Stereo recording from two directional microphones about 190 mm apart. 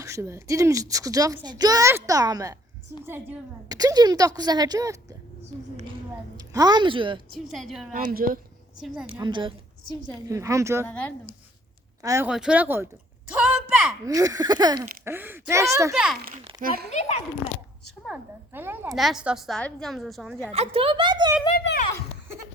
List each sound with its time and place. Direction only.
0.0 s a woman's voice: 15° right (ahead or behind)
6.5 s a woman's voice: 20° right (ahead or behind)
7.3 s a woman's voice: centre (ahead or behind)
7.9 s speech: 50° right (ahead or behind)
9.2 s a woman's voice: 25° right (ahead or behind)
10.8 s speech: 5° left (ahead or behind)
12.0 s a woman's voice: 15° right (ahead or behind)
12.3 s a woman's voice: 5° right (ahead or behind)
14.0 s a woman's voice: 20° right (ahead or behind)
16.6 s speech: 50° right (ahead or behind)
16.9 s a child's voice: 35° left (ahead or behind)
18.0 s a woman's voice: 5° right (ahead or behind)
20.5 s a woman's voice: 30° right (ahead or behind)